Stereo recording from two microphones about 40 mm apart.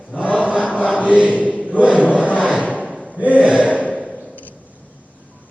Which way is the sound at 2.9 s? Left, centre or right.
Centre.